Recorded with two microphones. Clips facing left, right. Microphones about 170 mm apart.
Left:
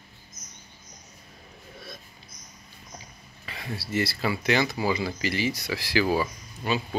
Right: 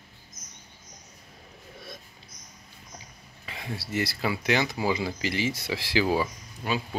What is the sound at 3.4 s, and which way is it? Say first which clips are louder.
Speech: left 1 dB; 15° right (ahead or behind).